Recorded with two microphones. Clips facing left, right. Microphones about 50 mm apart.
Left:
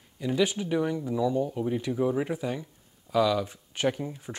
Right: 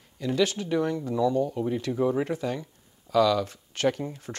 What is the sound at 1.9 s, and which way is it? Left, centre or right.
Speech, centre.